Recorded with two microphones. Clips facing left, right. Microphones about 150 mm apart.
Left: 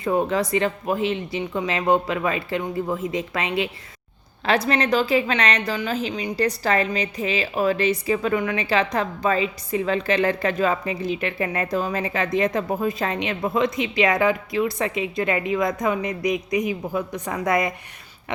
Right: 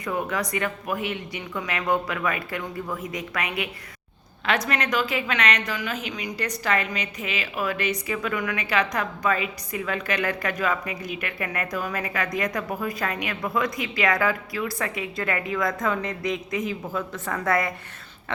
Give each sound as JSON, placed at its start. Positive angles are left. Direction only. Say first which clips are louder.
{"t": 0.0, "sound": "a woman's voice", "louder": "left 6 dB", "side_deg": 25}